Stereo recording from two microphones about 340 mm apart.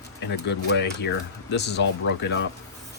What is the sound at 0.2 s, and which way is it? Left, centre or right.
Speech, left.